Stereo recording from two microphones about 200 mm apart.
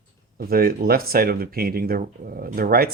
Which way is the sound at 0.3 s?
50° right (ahead or behind).